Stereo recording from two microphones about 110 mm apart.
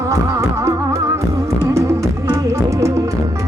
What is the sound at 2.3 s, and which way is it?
Music, 30° right (ahead or behind).